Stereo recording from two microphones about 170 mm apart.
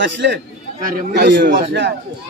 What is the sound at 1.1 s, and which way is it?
Speech, 75° right (ahead or behind).